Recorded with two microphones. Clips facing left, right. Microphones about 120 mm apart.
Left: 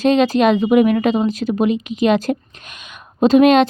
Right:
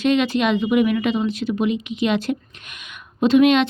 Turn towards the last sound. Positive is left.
turn(degrees=40)  # may be behind; listen again after turning